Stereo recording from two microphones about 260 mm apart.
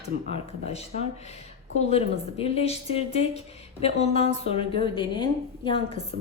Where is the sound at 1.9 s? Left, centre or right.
Left.